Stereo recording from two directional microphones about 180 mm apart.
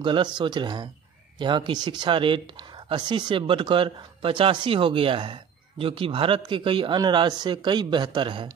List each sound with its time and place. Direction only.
0.0 s speech: 25° right (ahead or behind)